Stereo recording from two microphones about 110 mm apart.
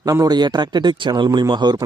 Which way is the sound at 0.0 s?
35° right (ahead or behind).